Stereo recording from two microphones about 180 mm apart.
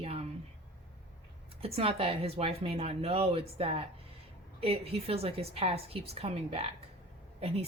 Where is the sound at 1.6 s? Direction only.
30° right (ahead or behind).